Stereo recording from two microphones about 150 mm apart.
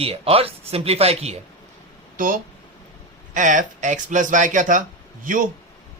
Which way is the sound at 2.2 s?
65° right (ahead or behind).